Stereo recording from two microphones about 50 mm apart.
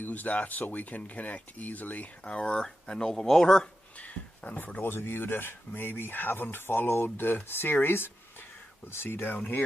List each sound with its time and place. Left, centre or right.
0.0 s speech: left; by 3.7 s centre
3.9 s a sound: left
4.8 s speech: left